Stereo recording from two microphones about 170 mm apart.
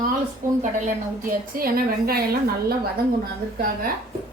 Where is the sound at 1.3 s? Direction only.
60° right (ahead or behind).